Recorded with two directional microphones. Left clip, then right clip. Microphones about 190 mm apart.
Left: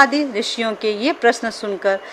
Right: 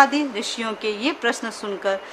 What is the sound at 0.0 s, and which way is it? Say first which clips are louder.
Speech: left 3 dB; 20° left (ahead or behind).